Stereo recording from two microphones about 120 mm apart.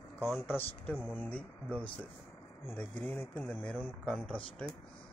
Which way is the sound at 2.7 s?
15° left (ahead or behind).